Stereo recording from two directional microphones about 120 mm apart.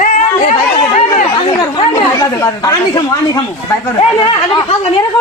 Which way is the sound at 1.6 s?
35° left (ahead or behind).